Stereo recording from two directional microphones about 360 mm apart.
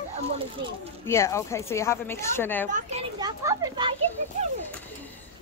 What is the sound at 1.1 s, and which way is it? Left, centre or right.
A woman's voice, centre.